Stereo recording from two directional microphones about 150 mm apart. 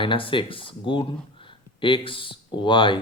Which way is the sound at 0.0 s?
35° left (ahead or behind).